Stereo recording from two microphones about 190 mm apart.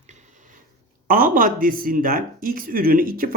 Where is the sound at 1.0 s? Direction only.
45° right (ahead or behind).